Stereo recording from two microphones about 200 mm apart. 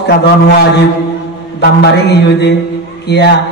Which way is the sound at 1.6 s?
55° left (ahead or behind).